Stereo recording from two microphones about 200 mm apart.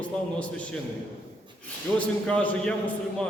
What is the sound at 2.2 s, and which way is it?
Speech, 5° left (ahead or behind).